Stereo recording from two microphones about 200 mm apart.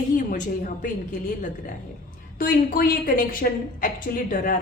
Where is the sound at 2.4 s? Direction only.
45° left (ahead or behind).